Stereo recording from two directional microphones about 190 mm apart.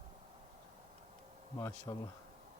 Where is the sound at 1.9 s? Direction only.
20° left (ahead or behind).